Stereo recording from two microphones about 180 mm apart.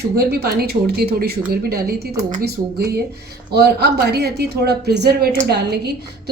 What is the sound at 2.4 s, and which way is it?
A woman's voice, 65° right (ahead or behind).